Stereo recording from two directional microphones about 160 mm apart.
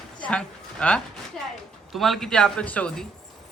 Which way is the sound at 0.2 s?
5° left (ahead or behind).